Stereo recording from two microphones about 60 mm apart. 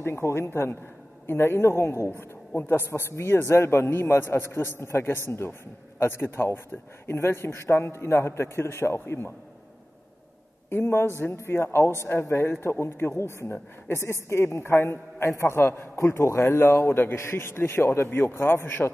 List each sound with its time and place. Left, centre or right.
0.0 s a man's voice: left
2.1 s speech: left
3.2 s a man's voice: left
10.7 s a man's voice: left